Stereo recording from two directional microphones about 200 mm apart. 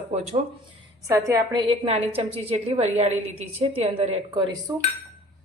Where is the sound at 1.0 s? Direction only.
15° right (ahead or behind).